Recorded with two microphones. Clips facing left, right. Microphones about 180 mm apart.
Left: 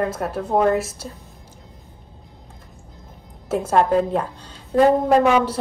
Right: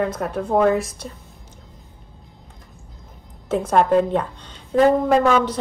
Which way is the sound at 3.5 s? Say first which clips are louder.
Right 1 dB; 5° left (ahead or behind).